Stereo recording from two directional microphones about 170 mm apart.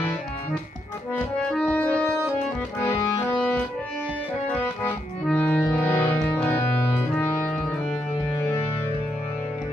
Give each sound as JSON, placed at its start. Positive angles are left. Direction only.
{"t": 1.1, "sound": "music", "side_deg": 5}
{"t": 4.8, "sound": "music", "side_deg": 10}